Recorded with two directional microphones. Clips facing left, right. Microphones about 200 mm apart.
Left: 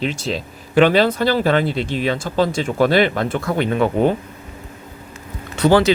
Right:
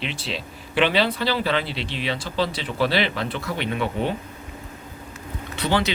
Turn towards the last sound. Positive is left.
turn(degrees=45)  # may be behind; listen again after turning